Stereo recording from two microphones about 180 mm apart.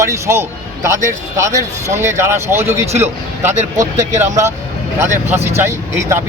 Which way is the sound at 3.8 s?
40° right (ahead or behind).